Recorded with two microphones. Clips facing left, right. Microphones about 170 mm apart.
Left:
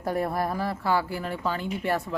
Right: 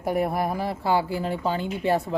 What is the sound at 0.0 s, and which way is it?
A woman's voice, 15° right (ahead or behind).